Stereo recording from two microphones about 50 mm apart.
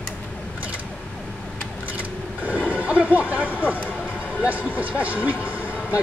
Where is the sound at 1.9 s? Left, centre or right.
Right.